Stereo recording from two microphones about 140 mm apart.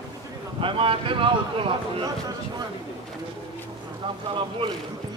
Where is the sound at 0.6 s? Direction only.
40° right (ahead or behind).